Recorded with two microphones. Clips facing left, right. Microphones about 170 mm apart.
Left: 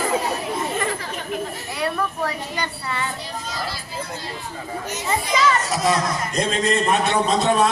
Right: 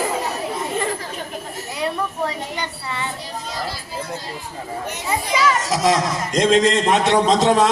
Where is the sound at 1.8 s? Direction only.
20° right (ahead or behind).